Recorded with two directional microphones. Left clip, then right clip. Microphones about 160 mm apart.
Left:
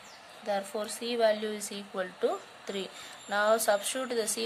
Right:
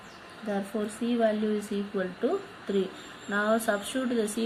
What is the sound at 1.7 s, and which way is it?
Speech, 55° left (ahead or behind).